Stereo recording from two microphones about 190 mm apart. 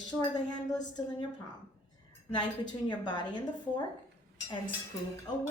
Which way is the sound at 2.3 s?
25° left (ahead or behind).